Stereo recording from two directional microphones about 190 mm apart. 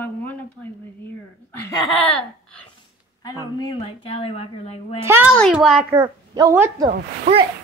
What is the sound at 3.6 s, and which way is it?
Speech, 25° left (ahead or behind).